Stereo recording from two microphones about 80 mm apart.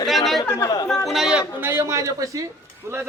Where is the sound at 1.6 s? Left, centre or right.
Right.